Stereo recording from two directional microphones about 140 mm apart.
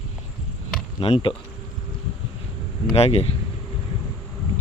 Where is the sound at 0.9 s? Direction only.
45° left (ahead or behind).